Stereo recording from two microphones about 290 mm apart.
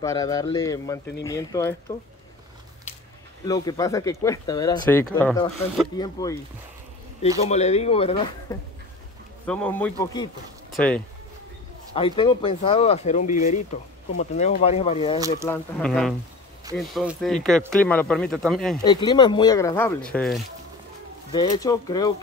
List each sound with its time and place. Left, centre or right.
0.0 s speech: centre
3.4 s speech: centre
7.4 s speech: left
9.5 s speech: centre
11.9 s speech: centre
15.1 s speech: centre
15.4 s speech: centre
18.8 s speech: centre
21.3 s speech: centre